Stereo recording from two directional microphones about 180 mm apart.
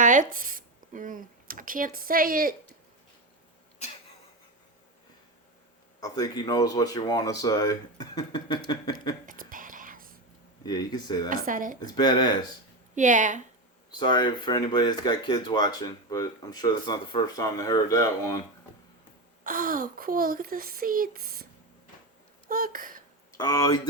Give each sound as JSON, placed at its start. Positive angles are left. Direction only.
{"t": 0.0, "sound": "speech", "side_deg": -45}
{"t": 6.0, "sound": "speech", "side_deg": 20}
{"t": 9.2, "sound": "whispering", "side_deg": -50}
{"t": 10.6, "sound": "speech", "side_deg": 25}
{"t": 11.4, "sound": "speech", "side_deg": -50}
{"t": 11.8, "sound": "speech", "side_deg": 20}
{"t": 13.0, "sound": "speech", "side_deg": -45}
{"t": 13.9, "sound": "speech", "side_deg": 25}
{"t": 19.5, "sound": "speech", "side_deg": -50}
{"t": 22.4, "sound": "a sound", "side_deg": -50}
{"t": 23.4, "sound": "speech", "side_deg": 20}